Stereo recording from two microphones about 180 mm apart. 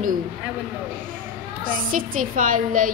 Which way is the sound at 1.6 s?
50° right (ahead or behind).